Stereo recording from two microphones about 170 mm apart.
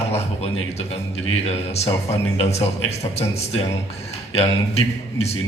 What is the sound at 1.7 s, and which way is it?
A man's voice, 40° left (ahead or behind).